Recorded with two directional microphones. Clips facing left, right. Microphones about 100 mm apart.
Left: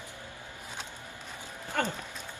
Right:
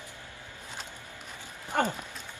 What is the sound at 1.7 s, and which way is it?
Speech, 20° right (ahead or behind).